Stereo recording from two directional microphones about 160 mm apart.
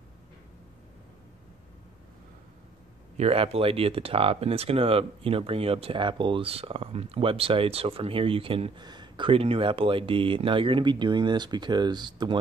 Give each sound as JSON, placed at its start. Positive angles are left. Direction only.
{"t": 3.2, "sound": "speech", "side_deg": -40}